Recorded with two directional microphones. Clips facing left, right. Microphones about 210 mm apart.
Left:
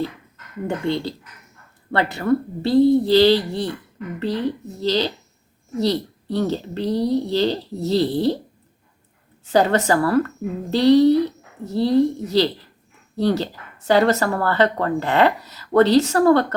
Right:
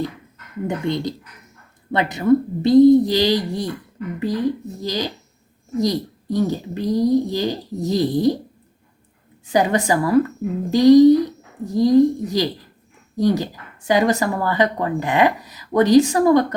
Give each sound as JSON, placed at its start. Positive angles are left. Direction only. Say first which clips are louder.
{"t": 0.9, "sound": "speech", "louder": "even", "side_deg": -15}
{"t": 9.5, "sound": "speech", "louder": "left 1 dB", "side_deg": -15}